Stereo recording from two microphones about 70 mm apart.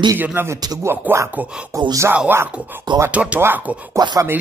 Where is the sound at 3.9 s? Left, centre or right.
Right.